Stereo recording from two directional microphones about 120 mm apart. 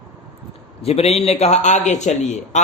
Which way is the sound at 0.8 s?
60° left (ahead or behind).